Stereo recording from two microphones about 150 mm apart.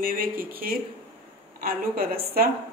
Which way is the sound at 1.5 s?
80° right.